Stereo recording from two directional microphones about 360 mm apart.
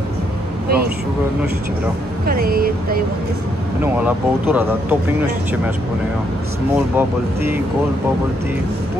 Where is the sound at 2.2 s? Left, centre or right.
Right.